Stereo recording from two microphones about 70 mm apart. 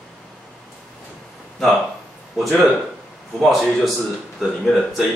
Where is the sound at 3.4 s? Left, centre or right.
Centre.